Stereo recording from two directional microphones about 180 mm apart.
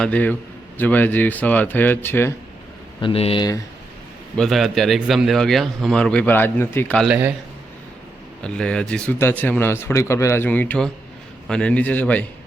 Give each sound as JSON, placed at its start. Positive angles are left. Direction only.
{"t": 0.0, "sound": "a man's voice", "side_deg": 10}
{"t": 3.0, "sound": "speech", "side_deg": 30}
{"t": 4.4, "sound": "speech", "side_deg": 0}
{"t": 7.1, "sound": "a man's voice", "side_deg": -10}
{"t": 8.4, "sound": "a man's voice", "side_deg": 5}